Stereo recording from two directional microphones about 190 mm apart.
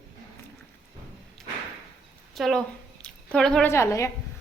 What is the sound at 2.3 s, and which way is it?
Speech, centre (ahead or behind).